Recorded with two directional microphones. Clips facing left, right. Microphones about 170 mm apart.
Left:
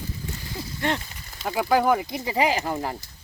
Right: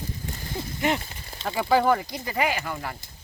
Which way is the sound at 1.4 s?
5° left (ahead or behind).